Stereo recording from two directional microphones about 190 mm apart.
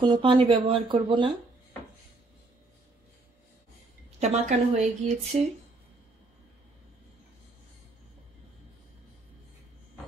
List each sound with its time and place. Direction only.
0.0 s speech: 25° right (ahead or behind)
4.2 s a woman's voice: 40° right (ahead or behind)